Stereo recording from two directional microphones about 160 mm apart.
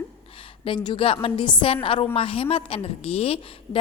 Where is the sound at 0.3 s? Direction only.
35° left (ahead or behind).